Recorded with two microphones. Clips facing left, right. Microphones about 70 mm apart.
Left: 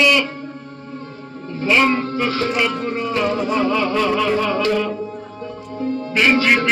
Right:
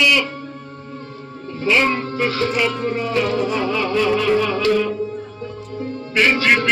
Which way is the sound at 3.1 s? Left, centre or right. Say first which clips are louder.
Left 1 dB; left.